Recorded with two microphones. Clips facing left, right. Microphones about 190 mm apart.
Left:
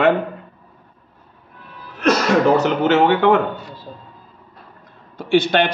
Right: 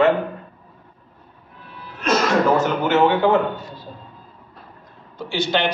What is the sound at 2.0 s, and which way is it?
Speech, 70° left (ahead or behind).